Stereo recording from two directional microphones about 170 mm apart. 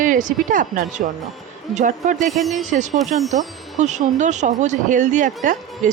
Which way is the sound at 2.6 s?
45° right (ahead or behind).